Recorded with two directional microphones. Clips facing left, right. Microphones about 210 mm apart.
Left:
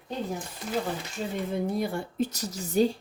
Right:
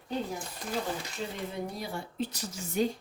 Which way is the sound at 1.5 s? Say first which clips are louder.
Left 8 dB; 55° left (ahead or behind).